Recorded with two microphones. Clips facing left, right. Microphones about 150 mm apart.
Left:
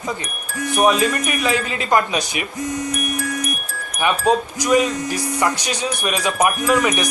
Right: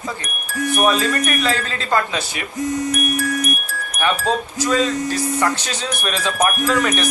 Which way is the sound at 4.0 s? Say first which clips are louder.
Left 2 dB; 15° left (ahead or behind).